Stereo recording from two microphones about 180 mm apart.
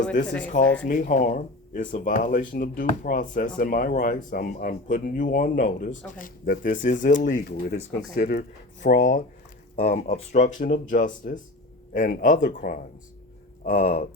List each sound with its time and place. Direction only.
0.5 s speech: 45° left (ahead or behind)